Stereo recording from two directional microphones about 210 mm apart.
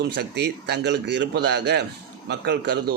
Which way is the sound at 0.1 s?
50° right (ahead or behind).